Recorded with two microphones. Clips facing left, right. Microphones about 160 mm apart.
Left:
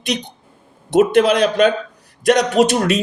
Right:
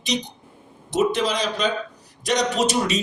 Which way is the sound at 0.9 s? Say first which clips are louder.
Left 8 dB; 55° left (ahead or behind).